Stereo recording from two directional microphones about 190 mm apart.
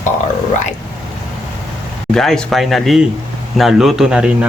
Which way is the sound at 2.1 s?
Centre (ahead or behind).